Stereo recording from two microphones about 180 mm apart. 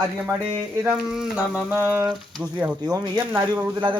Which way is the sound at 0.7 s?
15° right (ahead or behind).